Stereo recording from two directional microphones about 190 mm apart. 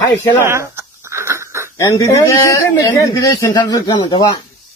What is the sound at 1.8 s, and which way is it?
A man's voice, 15° left (ahead or behind).